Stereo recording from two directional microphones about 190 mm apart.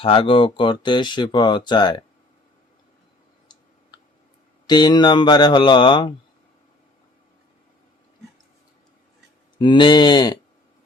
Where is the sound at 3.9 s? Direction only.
20° left (ahead or behind).